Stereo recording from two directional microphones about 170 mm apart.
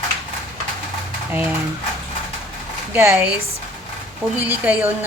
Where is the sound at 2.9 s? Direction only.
10° right (ahead or behind).